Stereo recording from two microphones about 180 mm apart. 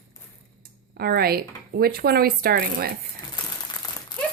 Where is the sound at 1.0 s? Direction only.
60° right (ahead or behind).